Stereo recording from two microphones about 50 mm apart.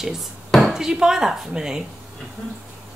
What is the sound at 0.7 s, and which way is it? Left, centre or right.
Speech, centre.